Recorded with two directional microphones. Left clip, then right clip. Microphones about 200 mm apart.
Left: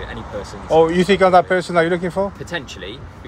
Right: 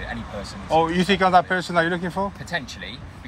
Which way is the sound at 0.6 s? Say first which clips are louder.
Left 6 dB; 15° left (ahead or behind).